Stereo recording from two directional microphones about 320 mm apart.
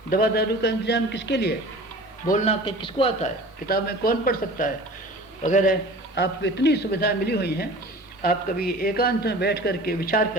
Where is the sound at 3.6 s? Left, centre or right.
Left.